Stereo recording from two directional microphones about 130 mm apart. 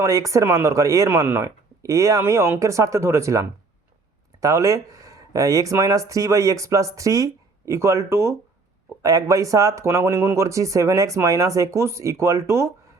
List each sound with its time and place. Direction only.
0.0 s speech: 25° right (ahead or behind)